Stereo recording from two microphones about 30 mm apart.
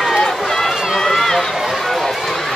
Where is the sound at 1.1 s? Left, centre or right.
Centre.